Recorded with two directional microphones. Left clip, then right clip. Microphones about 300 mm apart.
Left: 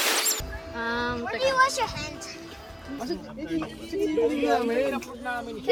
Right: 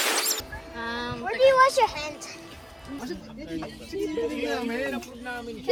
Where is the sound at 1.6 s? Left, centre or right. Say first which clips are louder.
Right 4 dB; centre.